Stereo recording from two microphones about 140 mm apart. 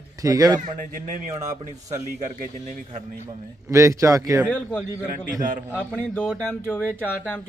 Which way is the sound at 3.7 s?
20° right (ahead or behind).